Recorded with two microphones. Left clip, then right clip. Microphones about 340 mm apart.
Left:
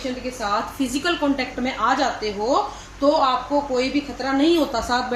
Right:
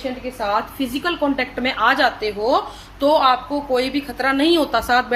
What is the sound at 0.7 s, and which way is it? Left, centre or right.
A woman's voice, right.